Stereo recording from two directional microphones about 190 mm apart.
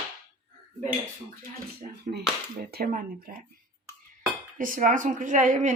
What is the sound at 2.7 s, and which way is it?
Speech, 50° right (ahead or behind).